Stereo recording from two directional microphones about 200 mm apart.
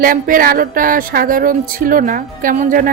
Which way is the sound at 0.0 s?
45° right (ahead or behind).